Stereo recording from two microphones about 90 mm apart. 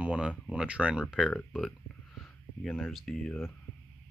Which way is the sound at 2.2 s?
15° left (ahead or behind).